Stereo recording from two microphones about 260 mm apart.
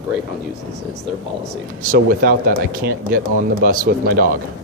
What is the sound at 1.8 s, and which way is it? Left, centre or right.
Speech, right.